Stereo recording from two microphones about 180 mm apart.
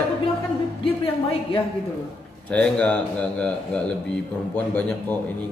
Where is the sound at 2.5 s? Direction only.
5° left (ahead or behind).